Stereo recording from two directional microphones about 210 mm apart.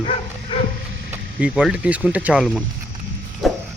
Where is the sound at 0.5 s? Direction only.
25° left (ahead or behind).